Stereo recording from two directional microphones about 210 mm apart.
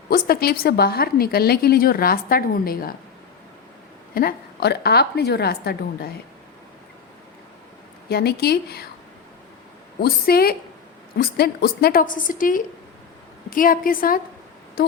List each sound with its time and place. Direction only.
0.1 s a woman's voice: 45° left (ahead or behind)
4.1 s a woman's voice: 45° left (ahead or behind)
8.1 s a woman's voice: 50° left (ahead or behind)
10.0 s a woman's voice: 45° left (ahead or behind)